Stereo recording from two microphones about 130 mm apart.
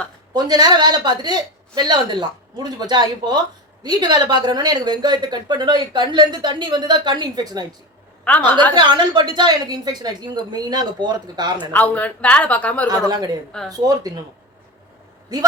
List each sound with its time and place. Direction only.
0.3 s a woman's voice: 30° right (ahead or behind)
8.2 s a woman's voice: 10° left (ahead or behind)
8.7 s a woman's voice: 35° right (ahead or behind)
11.7 s speech: 10° left (ahead or behind)
13.1 s speech: 30° right (ahead or behind)